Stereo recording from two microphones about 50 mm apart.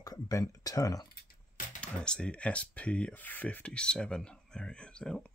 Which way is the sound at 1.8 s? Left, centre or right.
Centre.